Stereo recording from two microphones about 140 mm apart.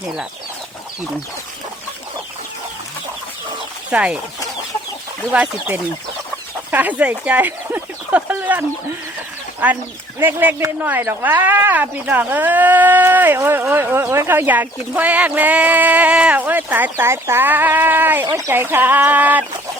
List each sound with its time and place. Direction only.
3.8 s speech: 10° right (ahead or behind)
5.3 s speech: 10° right (ahead or behind)